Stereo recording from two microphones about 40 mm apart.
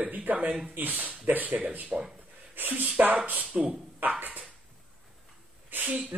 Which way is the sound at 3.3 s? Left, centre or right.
Right.